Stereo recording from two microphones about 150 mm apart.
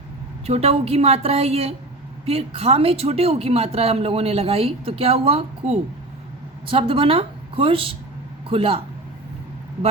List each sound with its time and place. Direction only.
0.4 s speech: 40° right (ahead or behind)